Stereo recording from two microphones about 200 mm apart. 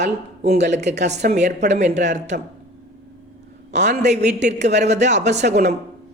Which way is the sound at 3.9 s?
35° right (ahead or behind).